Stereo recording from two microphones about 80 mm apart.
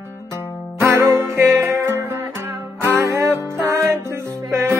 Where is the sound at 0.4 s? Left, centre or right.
Right.